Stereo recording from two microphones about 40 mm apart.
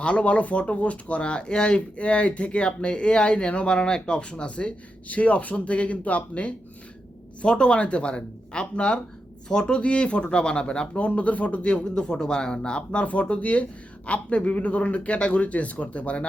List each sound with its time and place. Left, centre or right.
0.0 s speech: left
10.9 s speech: left